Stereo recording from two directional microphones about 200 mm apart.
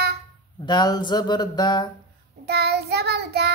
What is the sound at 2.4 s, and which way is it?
Child singing, 55° right (ahead or behind).